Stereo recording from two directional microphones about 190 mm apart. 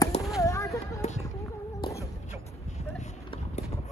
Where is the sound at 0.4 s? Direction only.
15° left (ahead or behind).